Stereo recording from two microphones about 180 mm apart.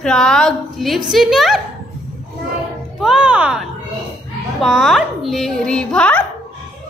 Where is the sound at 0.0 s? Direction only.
5° left (ahead or behind).